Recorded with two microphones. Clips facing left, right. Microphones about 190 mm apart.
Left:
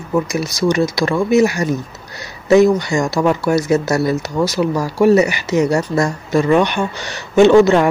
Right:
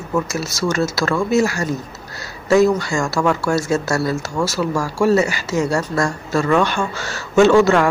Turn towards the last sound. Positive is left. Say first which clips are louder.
# left 3 dB
turn(degrees=20)  # may be behind; listen again after turning